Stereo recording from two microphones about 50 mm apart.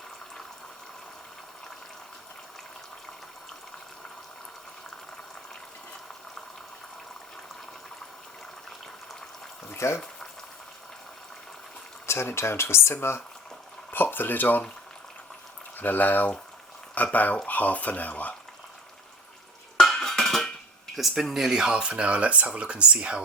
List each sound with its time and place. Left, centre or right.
9.7 s speech: left
12.0 s speech: left
13.9 s speech: left
15.8 s speech: left
19.7 s a sound: centre
20.9 s speech: centre; by 23.2 s right